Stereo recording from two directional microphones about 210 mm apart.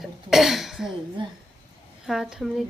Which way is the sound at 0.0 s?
Centre (ahead or behind).